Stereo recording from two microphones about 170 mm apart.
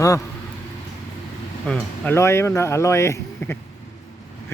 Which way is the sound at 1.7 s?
5° left (ahead or behind).